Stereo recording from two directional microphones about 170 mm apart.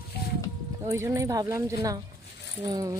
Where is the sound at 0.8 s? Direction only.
20° right (ahead or behind).